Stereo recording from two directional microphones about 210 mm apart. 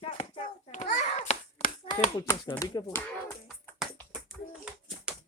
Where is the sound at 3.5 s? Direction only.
Centre (ahead or behind).